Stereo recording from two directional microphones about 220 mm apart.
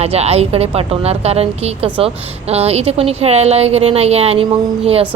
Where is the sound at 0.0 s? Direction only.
30° right (ahead or behind).